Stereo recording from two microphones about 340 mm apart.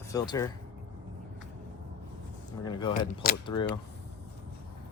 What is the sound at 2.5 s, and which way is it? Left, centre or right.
Speech, centre.